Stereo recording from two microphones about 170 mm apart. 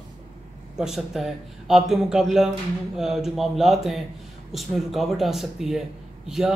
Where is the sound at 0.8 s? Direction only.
Centre (ahead or behind).